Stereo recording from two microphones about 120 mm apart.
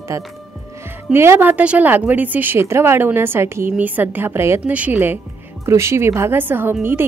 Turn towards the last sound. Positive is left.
turn(degrees=-20)  # may be behind; listen again after turning